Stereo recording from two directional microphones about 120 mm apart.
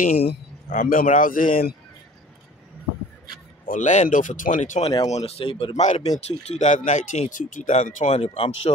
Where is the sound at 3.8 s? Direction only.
90° left.